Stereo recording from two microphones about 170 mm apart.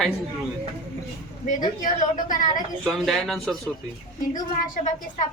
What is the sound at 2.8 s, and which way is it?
Speech, centre (ahead or behind).